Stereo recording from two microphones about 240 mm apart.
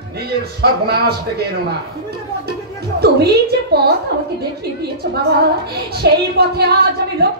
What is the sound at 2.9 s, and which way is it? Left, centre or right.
A woman's voice, right.